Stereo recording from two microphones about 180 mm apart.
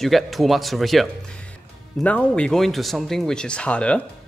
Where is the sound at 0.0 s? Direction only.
Centre (ahead or behind).